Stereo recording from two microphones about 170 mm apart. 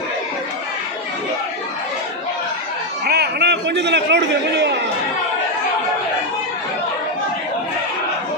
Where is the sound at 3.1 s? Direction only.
75° right (ahead or behind); by 4.8 s 90° right.